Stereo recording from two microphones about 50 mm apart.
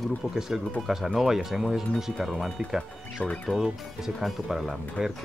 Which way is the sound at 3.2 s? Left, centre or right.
Left.